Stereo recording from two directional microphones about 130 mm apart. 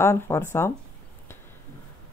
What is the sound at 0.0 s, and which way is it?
Speech, 20° left (ahead or behind).